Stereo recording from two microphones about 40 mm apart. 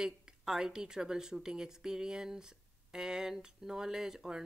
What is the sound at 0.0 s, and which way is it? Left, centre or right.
Speech, centre.